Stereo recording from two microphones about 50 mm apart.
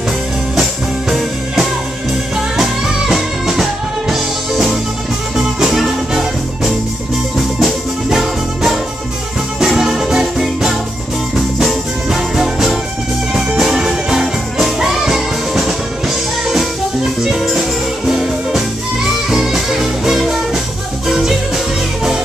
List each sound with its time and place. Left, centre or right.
1.1 s music: centre
17.2 s music: centre